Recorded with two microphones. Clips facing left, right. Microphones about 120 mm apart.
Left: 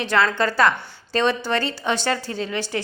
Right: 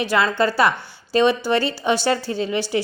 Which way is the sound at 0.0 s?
10° right (ahead or behind).